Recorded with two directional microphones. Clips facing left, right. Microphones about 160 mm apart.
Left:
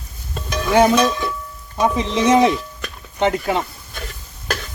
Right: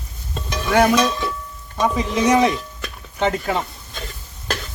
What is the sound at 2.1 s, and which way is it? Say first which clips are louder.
Speech: left 2 dB; 20° left (ahead or behind).